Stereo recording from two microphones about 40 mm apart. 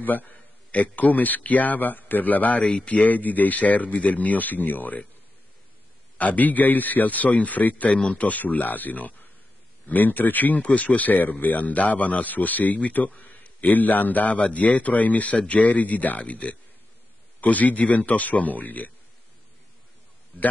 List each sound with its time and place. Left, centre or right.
0.0 s speech: left
6.1 s speech: left